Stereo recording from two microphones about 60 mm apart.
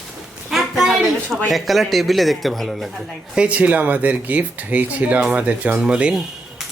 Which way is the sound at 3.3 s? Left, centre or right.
Right.